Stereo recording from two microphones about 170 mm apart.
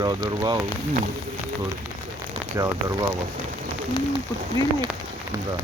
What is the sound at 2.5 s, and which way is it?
Speech, 20° right (ahead or behind).